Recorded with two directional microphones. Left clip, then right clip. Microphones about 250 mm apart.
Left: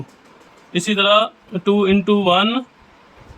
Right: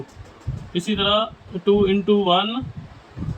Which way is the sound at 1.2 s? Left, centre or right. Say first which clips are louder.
Left 3 dB; left.